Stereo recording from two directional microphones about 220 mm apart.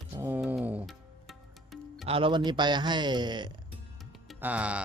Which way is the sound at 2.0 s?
25° right (ahead or behind).